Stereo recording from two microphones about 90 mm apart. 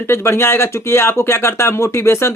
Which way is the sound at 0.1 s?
30° left (ahead or behind).